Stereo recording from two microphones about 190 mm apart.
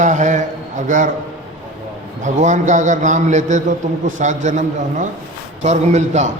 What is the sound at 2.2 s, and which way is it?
A man's voice, 40° right (ahead or behind).